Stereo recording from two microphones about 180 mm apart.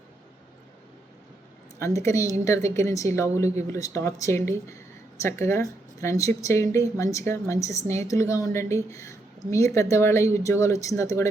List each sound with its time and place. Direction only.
1.8 s a woman's voice: 15° left (ahead or behind)